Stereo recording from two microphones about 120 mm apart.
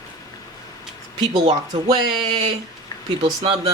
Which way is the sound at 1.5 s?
50° right (ahead or behind).